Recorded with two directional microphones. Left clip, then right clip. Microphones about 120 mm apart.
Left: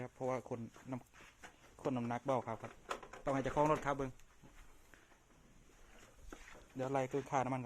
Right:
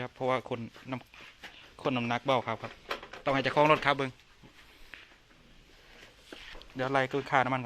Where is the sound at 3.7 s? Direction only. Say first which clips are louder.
Right 11 dB; 35° right (ahead or behind).